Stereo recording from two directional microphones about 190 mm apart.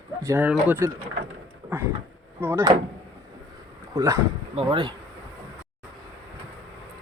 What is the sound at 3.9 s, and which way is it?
Speech, 15° right (ahead or behind).